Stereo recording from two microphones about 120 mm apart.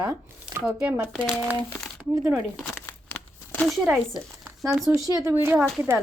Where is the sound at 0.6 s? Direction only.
15° right (ahead or behind).